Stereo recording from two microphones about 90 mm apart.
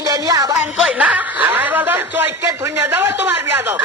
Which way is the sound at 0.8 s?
15° right (ahead or behind).